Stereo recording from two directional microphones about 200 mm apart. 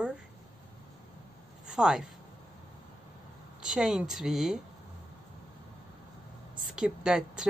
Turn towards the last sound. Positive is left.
turn(degrees=-5)  # may be behind; listen again after turning